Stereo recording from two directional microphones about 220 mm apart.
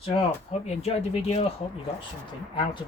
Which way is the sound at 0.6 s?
30° left (ahead or behind).